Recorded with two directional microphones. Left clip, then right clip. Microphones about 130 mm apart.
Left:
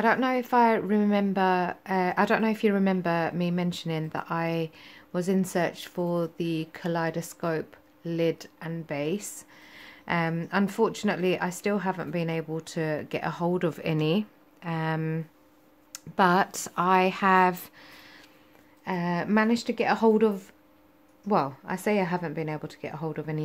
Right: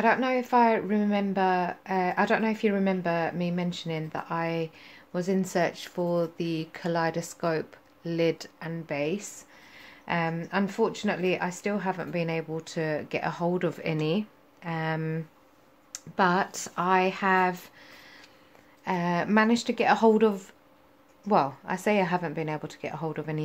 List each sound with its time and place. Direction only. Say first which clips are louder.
0.0 s speech: even; 25° left (ahead or behind)
16.2 s a woman's voice: left 2 dB; 30° left (ahead or behind)
18.9 s a woman's voice: right 2 dB; 5° left (ahead or behind)